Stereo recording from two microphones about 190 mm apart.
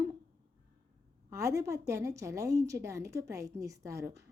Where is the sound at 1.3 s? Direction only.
15° right (ahead or behind).